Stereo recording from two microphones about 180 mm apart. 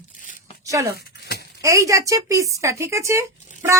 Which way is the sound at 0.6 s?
15° right (ahead or behind).